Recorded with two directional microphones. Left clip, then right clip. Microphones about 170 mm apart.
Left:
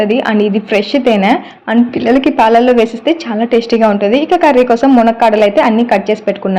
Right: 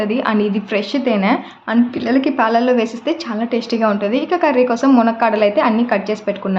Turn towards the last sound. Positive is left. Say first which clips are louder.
# left 6 dB
turn(degrees=20)  # may be behind; listen again after turning